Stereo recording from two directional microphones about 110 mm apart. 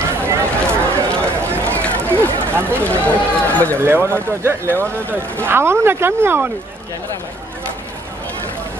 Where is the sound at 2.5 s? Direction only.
20° right (ahead or behind).